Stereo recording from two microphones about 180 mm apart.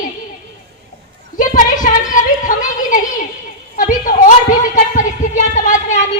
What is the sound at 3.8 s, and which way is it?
Speech, 50° left (ahead or behind).